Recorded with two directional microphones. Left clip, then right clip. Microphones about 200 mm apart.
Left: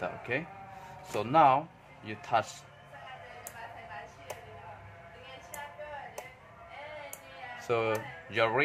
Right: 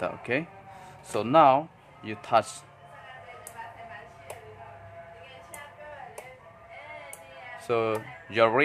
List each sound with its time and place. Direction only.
0.0 s a man's voice: 25° right (ahead or behind)
7.6 s speech: 15° right (ahead or behind)